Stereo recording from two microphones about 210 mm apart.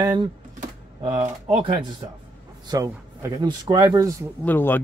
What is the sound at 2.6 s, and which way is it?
Speech, 15° right (ahead or behind).